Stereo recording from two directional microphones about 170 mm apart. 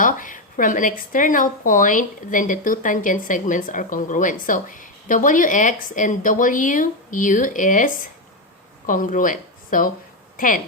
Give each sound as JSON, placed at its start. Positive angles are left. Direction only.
{"t": 0.0, "sound": "speech", "side_deg": 50}